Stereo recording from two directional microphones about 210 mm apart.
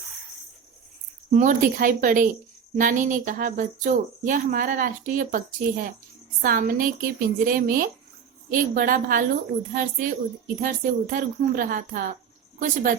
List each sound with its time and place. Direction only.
1.3 s speech: 35° right (ahead or behind)